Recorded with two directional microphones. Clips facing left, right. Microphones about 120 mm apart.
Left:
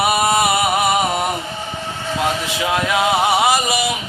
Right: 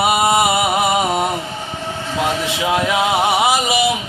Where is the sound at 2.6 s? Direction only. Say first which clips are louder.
Right 1 dB; 15° right (ahead or behind).